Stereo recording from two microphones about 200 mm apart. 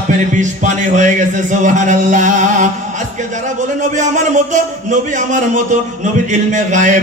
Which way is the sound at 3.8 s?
40° right (ahead or behind).